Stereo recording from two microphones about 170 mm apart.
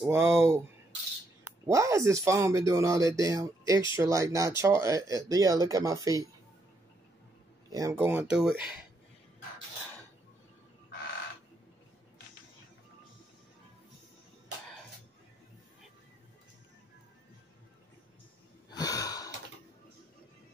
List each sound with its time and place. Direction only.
0.0 s speech: 15° right (ahead or behind)
7.7 s speech: 15° right (ahead or behind)
18.7 s wheeze: 25° left (ahead or behind)